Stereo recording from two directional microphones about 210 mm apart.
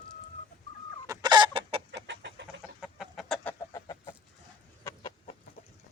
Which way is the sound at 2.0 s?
55° right (ahead or behind).